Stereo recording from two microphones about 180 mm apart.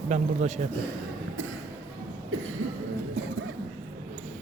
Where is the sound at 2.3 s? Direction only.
90° right.